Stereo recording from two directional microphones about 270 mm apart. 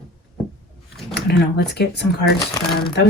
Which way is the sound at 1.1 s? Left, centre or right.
Left.